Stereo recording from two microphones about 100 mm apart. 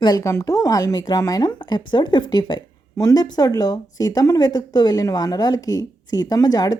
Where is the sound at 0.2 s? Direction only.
30° left (ahead or behind).